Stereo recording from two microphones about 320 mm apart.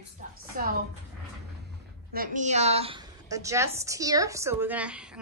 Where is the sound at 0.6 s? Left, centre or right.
Right.